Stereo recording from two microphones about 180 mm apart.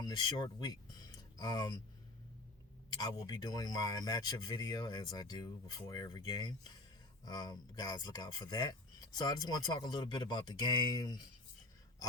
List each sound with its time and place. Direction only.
0.0 s speech: 20° left (ahead or behind)
3.0 s speech: 20° left (ahead or behind)